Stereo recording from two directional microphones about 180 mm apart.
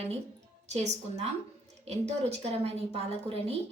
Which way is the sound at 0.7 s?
40° right (ahead or behind).